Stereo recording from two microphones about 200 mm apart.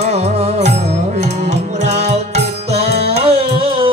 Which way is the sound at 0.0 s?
30° right (ahead or behind).